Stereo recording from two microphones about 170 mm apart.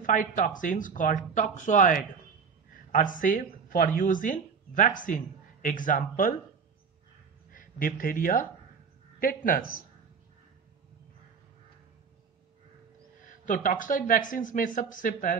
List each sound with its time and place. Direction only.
0.0 s speech: 50° left (ahead or behind)
7.5 s speech: 55° left (ahead or behind)
13.2 s speech: 50° left (ahead or behind)